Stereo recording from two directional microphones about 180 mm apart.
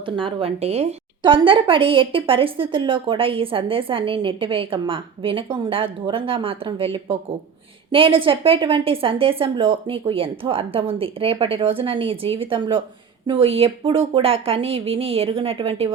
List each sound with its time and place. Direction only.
0.0 s a woman's voice: 30° right (ahead or behind)